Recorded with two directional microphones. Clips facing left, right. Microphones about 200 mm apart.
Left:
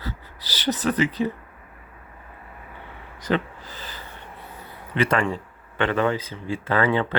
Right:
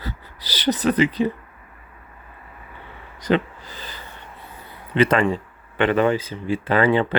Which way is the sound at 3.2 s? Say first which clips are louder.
Right 4 dB; 20° right (ahead or behind).